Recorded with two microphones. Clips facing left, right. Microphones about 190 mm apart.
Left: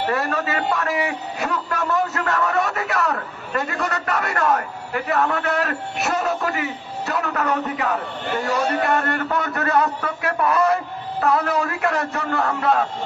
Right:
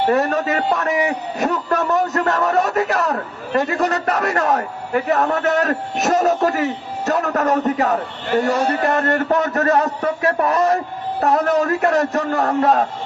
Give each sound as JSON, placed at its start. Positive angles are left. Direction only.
{"t": 0.1, "sound": "a man's voice", "side_deg": -40}